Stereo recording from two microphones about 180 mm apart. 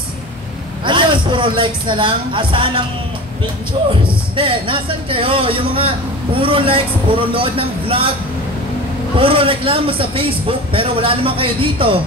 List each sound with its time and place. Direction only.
0.8 s a man's voice: 25° right (ahead or behind)
3.9 s a man's voice: 30° right (ahead or behind)
9.2 s speech: 30° right (ahead or behind)